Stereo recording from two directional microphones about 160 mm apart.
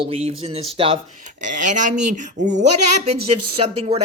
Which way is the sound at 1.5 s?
50° right (ahead or behind).